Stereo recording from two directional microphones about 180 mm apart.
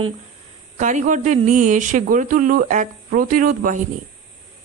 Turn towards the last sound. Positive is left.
turn(degrees=-50)  # may be behind; listen again after turning